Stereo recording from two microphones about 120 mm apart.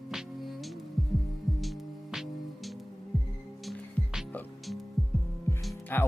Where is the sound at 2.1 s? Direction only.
Centre (ahead or behind).